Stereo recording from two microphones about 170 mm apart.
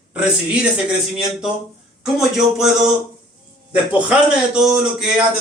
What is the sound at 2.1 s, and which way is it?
Speech, centre (ahead or behind).